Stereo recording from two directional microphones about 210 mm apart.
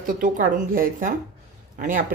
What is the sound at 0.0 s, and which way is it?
Speech, 40° right (ahead or behind).